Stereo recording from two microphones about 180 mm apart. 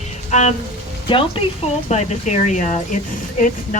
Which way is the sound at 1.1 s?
30° left (ahead or behind).